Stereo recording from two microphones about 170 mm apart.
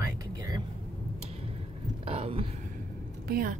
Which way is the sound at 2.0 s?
35° right (ahead or behind).